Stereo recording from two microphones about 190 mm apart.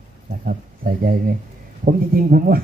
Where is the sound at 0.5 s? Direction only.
50° right (ahead or behind).